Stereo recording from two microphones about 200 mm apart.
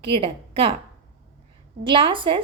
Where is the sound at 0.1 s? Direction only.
25° right (ahead or behind).